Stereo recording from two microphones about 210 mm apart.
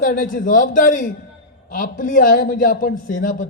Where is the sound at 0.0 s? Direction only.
40° left (ahead or behind).